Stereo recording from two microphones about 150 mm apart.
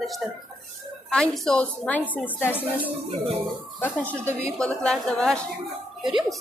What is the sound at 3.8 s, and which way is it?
A woman's voice, 10° left (ahead or behind).